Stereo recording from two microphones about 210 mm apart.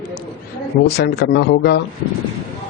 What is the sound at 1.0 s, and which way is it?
Speech, 50° left (ahead or behind).